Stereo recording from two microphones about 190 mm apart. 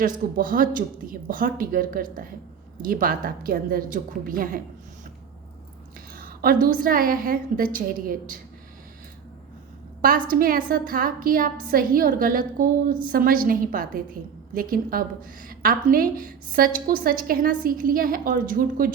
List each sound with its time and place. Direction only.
0.3 s a woman's voice: 45° right (ahead or behind)
6.1 s a woman's voice: 50° right (ahead or behind)
10.0 s a woman's voice: 50° right (ahead or behind)